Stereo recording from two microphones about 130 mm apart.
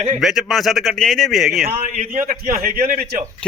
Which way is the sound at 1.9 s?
85° right.